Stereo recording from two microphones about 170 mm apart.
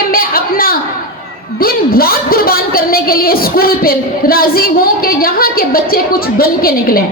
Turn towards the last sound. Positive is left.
turn(degrees=60)  # may be behind; listen again after turning